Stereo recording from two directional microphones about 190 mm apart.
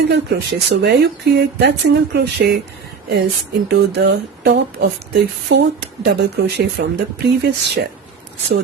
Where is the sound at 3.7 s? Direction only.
60° right (ahead or behind).